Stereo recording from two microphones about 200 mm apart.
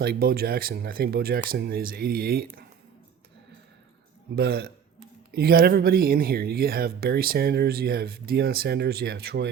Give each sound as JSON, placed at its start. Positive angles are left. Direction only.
{"t": 0.0, "sound": "speech", "side_deg": -50}
{"t": 4.4, "sound": "speech", "side_deg": -50}